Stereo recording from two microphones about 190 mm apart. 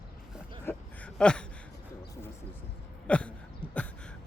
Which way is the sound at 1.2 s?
5° left (ahead or behind).